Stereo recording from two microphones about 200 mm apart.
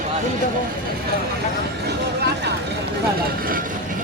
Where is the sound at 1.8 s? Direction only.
55° right (ahead or behind).